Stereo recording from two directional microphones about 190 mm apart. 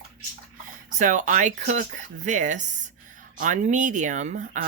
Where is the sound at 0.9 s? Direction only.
40° right (ahead or behind).